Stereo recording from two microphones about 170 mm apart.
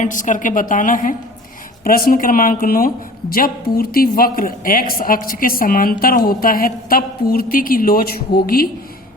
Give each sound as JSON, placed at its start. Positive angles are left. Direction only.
{"t": 0.0, "sound": "a woman's voice", "side_deg": 50}